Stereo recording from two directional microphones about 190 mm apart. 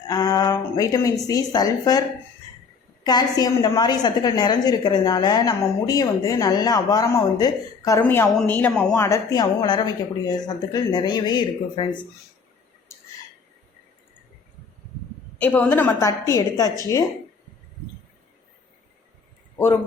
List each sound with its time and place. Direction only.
0.1 s a sound: 20° left (ahead or behind)
1.3 s a woman's voice: 20° left (ahead or behind); by 9.0 s 5° left (ahead or behind)
9.0 s a woman's voice: 15° left (ahead or behind)
15.4 s a woman's voice: 10° left (ahead or behind)